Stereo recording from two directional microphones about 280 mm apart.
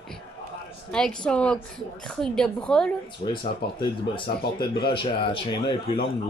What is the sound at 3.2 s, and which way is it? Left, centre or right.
Speech, left.